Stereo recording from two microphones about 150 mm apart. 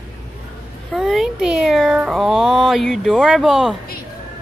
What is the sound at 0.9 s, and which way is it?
Speech, centre (ahead or behind).